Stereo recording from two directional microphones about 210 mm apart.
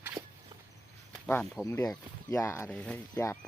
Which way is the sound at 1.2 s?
5° left (ahead or behind).